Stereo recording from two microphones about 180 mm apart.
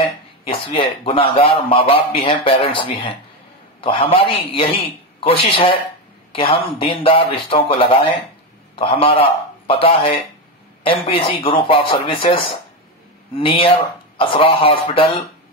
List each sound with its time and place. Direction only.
0.0 s a man's voice: 30° left (ahead or behind)